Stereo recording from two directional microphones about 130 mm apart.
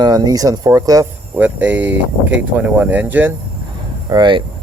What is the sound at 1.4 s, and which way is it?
Speech, 10° right (ahead or behind).